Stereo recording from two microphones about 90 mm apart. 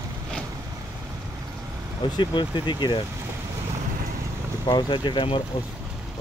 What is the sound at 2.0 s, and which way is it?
Speech, 60° left (ahead or behind).